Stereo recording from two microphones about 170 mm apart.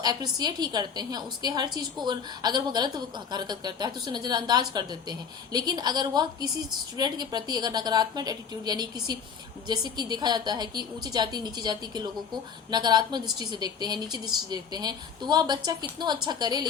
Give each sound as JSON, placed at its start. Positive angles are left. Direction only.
{"t": 0.0, "sound": "a woman's voice", "side_deg": -25}